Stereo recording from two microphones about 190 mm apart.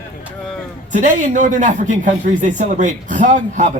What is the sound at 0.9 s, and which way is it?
A man's voice, 40° right (ahead or behind).